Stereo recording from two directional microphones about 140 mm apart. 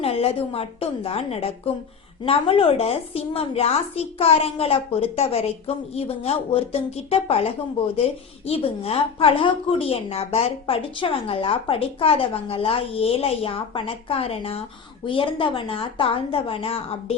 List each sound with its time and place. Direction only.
0.0 s a woman's voice: 45° left (ahead or behind)